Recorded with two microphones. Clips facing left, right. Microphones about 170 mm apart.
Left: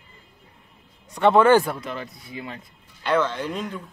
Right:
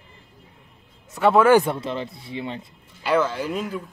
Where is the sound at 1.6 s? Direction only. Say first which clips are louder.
Right 3 dB; 25° right (ahead or behind).